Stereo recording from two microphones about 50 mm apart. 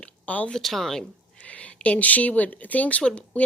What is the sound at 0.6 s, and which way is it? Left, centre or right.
Speech, centre.